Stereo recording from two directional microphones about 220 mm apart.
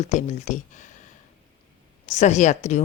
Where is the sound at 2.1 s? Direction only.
30° left (ahead or behind).